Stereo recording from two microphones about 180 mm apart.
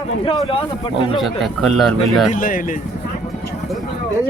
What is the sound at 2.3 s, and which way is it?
Speech, 50° left (ahead or behind).